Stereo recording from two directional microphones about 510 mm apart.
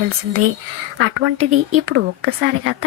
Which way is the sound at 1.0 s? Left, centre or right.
Right.